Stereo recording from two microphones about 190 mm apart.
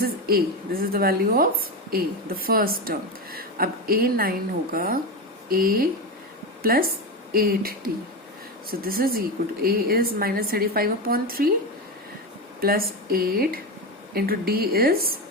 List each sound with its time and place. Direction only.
0.0 s a sound: 50° right (ahead or behind)
0.9 s speech: 50° right (ahead or behind)
8.8 s speech: 50° right (ahead or behind)
12.5 s speech: 50° right (ahead or behind)